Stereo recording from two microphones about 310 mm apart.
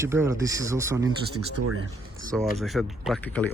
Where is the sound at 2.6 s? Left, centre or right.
Centre.